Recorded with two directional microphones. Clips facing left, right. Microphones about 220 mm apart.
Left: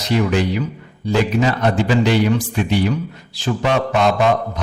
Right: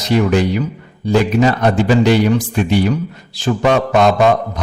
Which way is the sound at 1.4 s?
45° right (ahead or behind).